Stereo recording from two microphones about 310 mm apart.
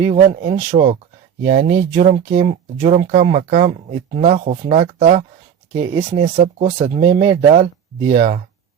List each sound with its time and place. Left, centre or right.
0.1 s speech: right
7.2 s speech: centre
8.1 s speech: right